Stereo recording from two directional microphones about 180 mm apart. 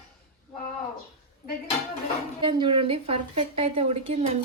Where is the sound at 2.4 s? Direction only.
25° right (ahead or behind).